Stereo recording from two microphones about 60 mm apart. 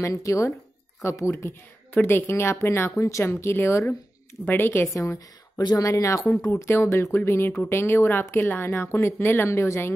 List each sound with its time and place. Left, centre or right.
0.0 s speech: left
1.0 s a woman's voice: left
2.9 s a woman's voice: left
4.9 s a woman's voice: left
6.4 s a woman's voice: left
9.5 s speech: left